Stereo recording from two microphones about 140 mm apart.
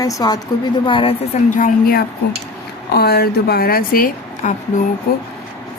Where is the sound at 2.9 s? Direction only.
90° left.